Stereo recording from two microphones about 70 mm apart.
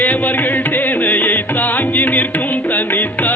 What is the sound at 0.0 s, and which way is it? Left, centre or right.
Music, left.